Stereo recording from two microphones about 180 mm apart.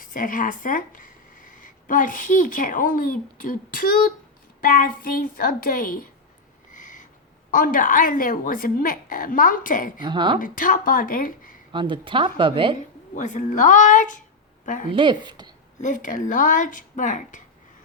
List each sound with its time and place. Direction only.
0.0 s a woman's voice: 50° left (ahead or behind)
6.7 s owl: 45° left (ahead or behind)
7.5 s a woman's voice: 50° left (ahead or behind)
10.0 s a woman's voice: 25° right (ahead or behind)
10.4 s a woman's voice: 50° left (ahead or behind)
11.7 s a woman's voice: 25° right (ahead or behind)
13.1 s a woman's voice: 40° left (ahead or behind)
14.6 s a sound: 45° left (ahead or behind)
14.9 s a woman's voice: 25° right (ahead or behind)
15.8 s a woman's voice: 45° left (ahead or behind)